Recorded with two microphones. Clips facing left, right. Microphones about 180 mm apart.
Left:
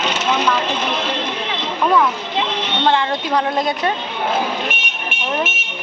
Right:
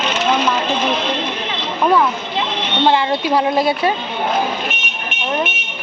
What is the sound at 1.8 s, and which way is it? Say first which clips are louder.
Speech: right 1 dB; 5° right (ahead or behind).